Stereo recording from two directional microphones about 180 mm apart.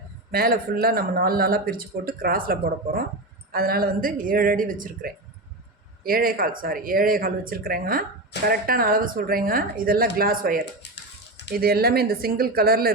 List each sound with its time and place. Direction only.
0.3 s speech: 55° right (ahead or behind)